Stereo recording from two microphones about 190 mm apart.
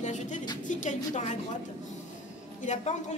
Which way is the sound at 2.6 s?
40° left (ahead or behind).